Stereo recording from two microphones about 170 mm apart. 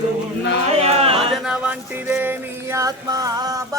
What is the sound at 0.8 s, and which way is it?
Speech, 35° right (ahead or behind).